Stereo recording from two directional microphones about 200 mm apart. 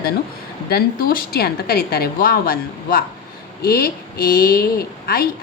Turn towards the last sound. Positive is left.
turn(degrees=50)  # may be behind; listen again after turning